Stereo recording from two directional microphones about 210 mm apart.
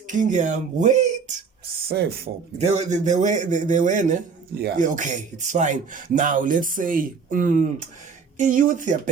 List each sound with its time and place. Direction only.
0.1 s speech: 35° right (ahead or behind)
1.9 s speech: 50° right (ahead or behind)
2.6 s speech: 30° right (ahead or behind)